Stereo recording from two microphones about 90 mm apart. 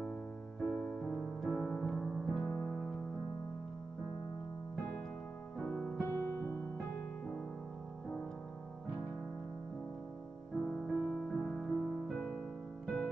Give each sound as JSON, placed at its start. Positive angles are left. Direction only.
{"t": 0.6, "sound": "piano", "side_deg": 10}
{"t": 2.6, "sound": "music", "side_deg": 5}
{"t": 5.6, "sound": "music", "side_deg": 20}
{"t": 5.9, "sound": "music", "side_deg": 30}
{"t": 10.9, "sound": "music", "side_deg": 0}
{"t": 12.1, "sound": "music", "side_deg": 15}